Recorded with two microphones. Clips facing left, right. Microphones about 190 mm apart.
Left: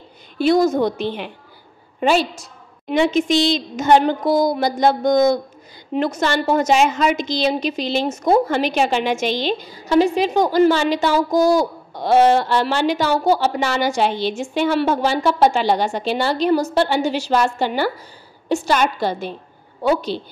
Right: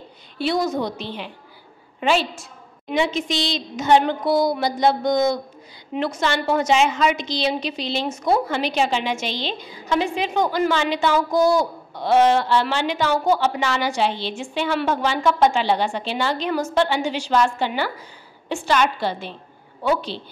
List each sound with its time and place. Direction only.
0.4 s a woman's voice: 45° left (ahead or behind)
2.0 s a woman's voice: 40° left (ahead or behind)